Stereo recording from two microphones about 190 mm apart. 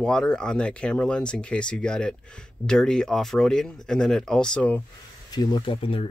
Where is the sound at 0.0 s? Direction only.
5° left (ahead or behind).